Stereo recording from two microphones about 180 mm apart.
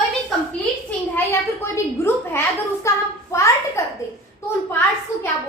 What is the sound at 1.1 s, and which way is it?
A woman's voice, 15° left (ahead or behind).